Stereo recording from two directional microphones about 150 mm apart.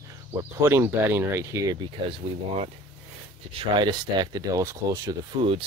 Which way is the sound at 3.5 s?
30° right (ahead or behind).